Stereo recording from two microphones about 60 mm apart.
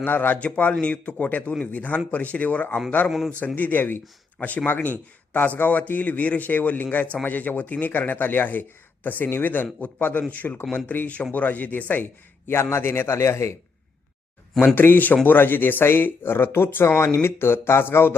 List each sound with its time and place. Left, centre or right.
0.0 s speech: left
3.1 s a man's voice: centre
3.4 s speech: left
12.7 s speech: left
14.8 s speech: left